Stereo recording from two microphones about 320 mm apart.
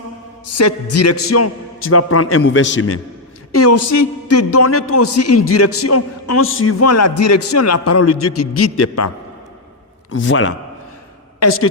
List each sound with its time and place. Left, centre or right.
0.5 s a man's voice: left
10.1 s a man's voice: left